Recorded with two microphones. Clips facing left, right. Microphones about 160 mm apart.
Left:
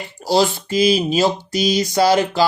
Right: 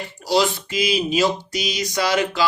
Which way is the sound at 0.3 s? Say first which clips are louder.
Left 3 dB; 30° left (ahead or behind).